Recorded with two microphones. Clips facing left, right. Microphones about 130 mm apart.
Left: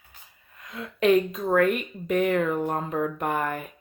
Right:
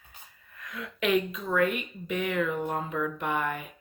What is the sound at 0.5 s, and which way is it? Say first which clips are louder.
Speech: left 3 dB; 25° left (ahead or behind).